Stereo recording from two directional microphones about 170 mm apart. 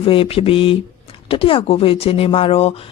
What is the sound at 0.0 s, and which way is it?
Speech, 35° left (ahead or behind).